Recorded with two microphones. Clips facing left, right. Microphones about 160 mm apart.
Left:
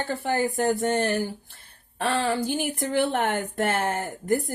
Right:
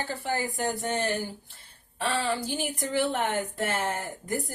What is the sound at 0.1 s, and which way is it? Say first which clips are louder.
Speech: left 5 dB; 55° left (ahead or behind).